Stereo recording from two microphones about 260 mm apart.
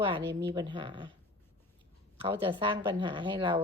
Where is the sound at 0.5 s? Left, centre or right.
Centre.